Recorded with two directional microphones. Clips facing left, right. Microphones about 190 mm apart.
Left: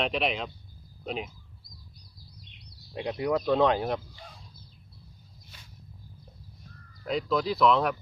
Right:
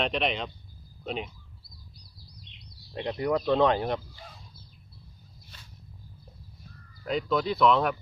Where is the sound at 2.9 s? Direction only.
Centre (ahead or behind).